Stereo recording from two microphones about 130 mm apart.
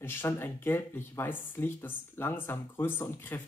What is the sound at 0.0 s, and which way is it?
Speech, 20° left (ahead or behind).